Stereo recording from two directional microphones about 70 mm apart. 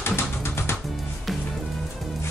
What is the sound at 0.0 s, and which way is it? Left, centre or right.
Music, left.